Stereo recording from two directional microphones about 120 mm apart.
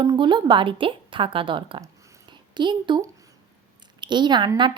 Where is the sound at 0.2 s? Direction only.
40° right (ahead or behind).